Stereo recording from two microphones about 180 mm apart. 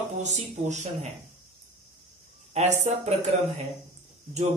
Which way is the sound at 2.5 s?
40° right (ahead or behind).